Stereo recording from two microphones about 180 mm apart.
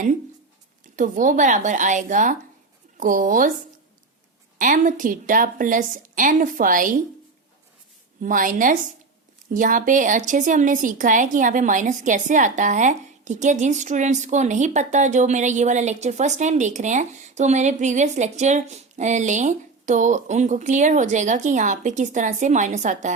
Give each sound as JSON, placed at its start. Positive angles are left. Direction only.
{"t": 0.9, "sound": "a woman's voice", "side_deg": -45}
{"t": 4.5, "sound": "a woman's voice", "side_deg": -45}
{"t": 8.2, "sound": "a woman's voice", "side_deg": -45}